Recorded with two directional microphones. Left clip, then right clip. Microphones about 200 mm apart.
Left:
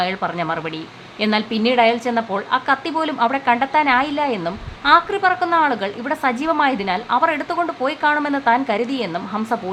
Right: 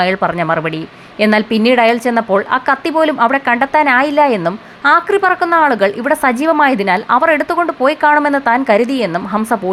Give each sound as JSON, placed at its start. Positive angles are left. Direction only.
{"t": 0.0, "sound": "a woman's voice", "side_deg": -25}